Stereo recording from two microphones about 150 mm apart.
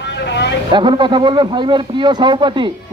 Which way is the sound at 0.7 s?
30° right (ahead or behind).